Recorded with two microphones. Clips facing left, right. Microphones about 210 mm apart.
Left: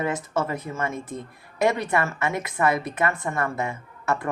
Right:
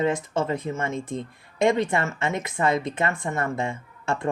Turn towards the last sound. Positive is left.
turn(degrees=-25)  # may be behind; listen again after turning